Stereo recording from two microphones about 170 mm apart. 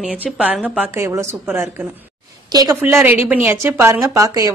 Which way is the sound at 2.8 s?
10° right (ahead or behind).